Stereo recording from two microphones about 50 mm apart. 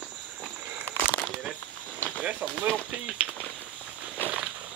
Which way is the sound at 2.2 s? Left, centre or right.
Right.